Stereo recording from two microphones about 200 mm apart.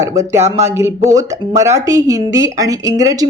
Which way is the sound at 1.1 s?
15° right (ahead or behind).